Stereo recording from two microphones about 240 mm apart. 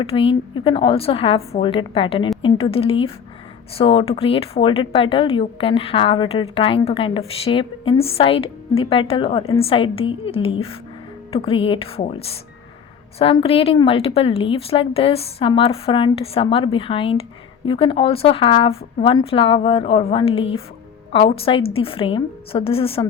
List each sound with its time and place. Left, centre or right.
0.0 s a woman's voice: left